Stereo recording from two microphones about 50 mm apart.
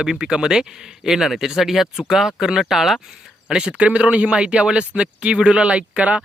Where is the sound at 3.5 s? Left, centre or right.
Right.